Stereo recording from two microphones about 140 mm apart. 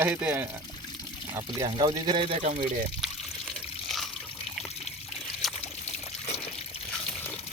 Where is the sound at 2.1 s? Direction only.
35° right (ahead or behind).